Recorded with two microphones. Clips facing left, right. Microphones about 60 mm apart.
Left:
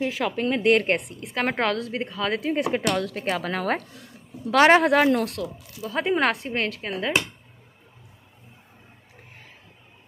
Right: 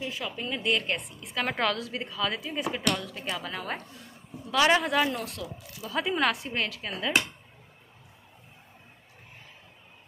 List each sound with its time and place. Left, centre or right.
0.0 s speech: left
0.7 s speech: left
1.3 s a woman's voice: left
3.0 s speech: left
5.8 s a woman's voice: left